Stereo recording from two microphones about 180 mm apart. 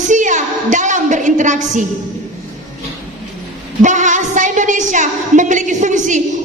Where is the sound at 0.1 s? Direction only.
45° right (ahead or behind).